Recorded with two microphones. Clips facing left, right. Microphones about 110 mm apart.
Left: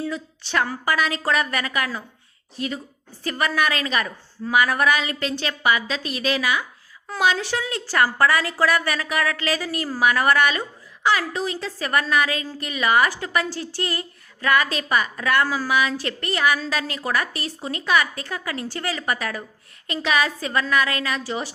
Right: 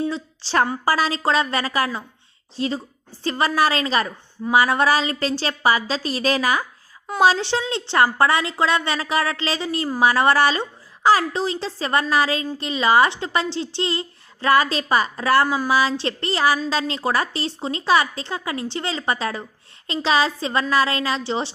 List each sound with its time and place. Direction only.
0.0 s a woman's voice: 30° right (ahead or behind)
15.4 s a woman's voice: 20° right (ahead or behind)